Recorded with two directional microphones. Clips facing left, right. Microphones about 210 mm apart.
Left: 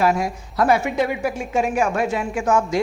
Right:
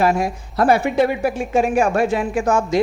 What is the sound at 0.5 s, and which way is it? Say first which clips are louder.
A man's voice: right 3 dB; 30° right (ahead or behind).